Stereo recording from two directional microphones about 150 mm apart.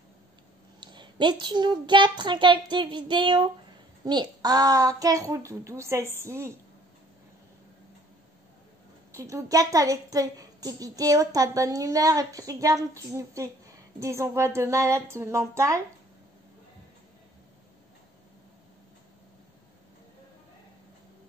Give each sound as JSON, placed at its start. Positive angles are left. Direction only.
{"t": 0.7, "sound": "a child's voice", "side_deg": -30}
{"t": 9.1, "sound": "a woman's voice", "side_deg": -20}